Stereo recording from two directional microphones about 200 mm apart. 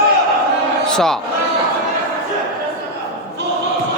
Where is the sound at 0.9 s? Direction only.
5° left (ahead or behind).